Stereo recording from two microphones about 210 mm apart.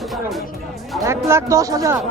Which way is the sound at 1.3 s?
15° right (ahead or behind).